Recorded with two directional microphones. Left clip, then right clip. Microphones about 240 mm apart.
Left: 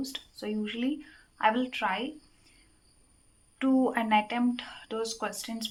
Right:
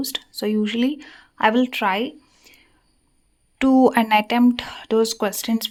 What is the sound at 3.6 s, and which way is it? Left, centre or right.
Speech, right.